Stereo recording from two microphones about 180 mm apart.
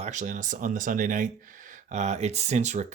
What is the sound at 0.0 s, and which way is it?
Speech, 40° right (ahead or behind).